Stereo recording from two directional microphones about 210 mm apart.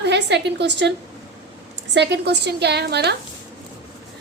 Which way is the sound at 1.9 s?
55° right (ahead or behind).